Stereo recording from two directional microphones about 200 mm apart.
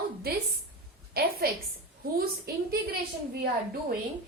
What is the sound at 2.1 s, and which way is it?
Speech, 50° right (ahead or behind).